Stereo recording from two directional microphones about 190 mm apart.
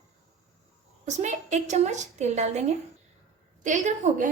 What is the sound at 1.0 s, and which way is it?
A woman's voice, 40° right (ahead or behind).